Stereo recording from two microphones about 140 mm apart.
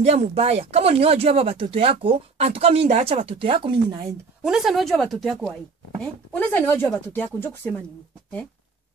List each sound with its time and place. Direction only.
0.0 s speech: 50° right (ahead or behind)
4.4 s speech: 5° right (ahead or behind)
6.0 s speech: 10° left (ahead or behind)